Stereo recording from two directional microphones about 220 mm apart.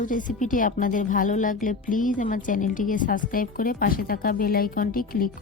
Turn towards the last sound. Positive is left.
turn(degrees=40)  # may be behind; listen again after turning